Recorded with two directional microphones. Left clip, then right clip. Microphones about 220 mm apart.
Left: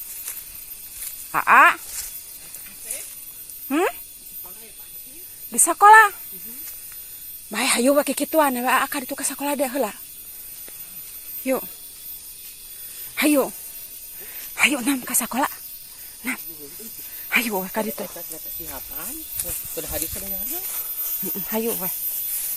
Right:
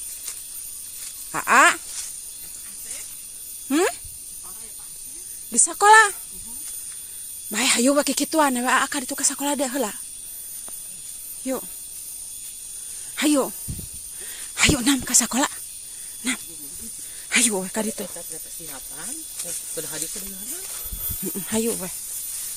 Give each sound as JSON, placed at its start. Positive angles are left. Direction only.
{"t": 1.3, "sound": "speech", "side_deg": -30}
{"t": 3.7, "sound": "speech", "side_deg": -35}
{"t": 5.5, "sound": "speech", "side_deg": -30}
{"t": 7.5, "sound": "speech", "side_deg": -25}
{"t": 11.4, "sound": "speech", "side_deg": 0}
{"t": 13.1, "sound": "speech", "side_deg": -20}
{"t": 14.3, "sound": "speech", "side_deg": -35}
{"t": 17.2, "sound": "speech", "side_deg": -30}
{"t": 21.3, "sound": "speech", "side_deg": -35}